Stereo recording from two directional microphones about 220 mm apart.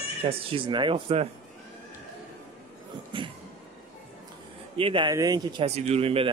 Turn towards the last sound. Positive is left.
turn(degrees=-25)  # may be behind; listen again after turning